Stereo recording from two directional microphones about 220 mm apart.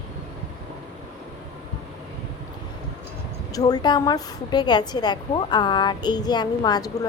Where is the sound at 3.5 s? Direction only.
15° left (ahead or behind).